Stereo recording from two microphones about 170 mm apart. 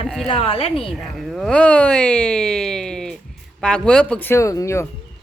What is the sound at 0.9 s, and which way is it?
Speech, centre (ahead or behind).